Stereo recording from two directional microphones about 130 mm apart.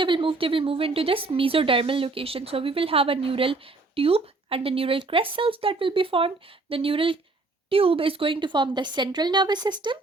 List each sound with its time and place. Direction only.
0.0 s a woman's voice: 40° right (ahead or behind)